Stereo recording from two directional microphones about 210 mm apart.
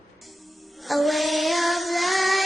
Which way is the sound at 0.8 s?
Centre (ahead or behind).